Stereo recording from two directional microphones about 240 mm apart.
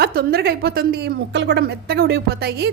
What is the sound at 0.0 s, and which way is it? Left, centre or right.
A woman's voice, right.